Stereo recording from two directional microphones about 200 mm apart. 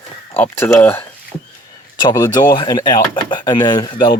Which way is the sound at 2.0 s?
20° left (ahead or behind).